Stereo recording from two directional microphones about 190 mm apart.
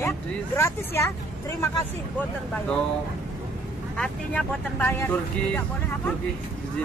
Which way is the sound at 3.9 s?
5° left (ahead or behind).